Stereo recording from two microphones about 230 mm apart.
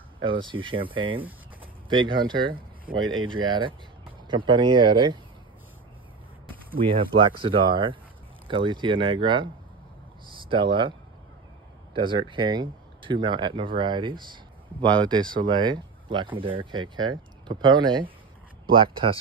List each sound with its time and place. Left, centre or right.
0.2 s speech: right
6.8 s speech: right